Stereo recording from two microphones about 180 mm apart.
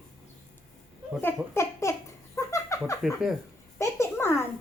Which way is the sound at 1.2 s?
15° left (ahead or behind).